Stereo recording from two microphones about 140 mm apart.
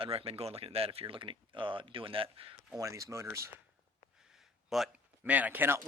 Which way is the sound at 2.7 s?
25° right (ahead or behind).